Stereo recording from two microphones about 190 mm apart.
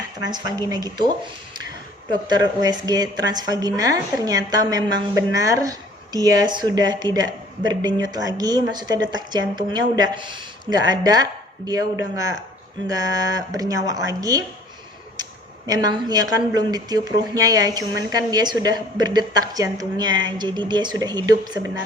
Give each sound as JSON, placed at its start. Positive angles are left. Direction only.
{"t": 0.2, "sound": "speech", "side_deg": -20}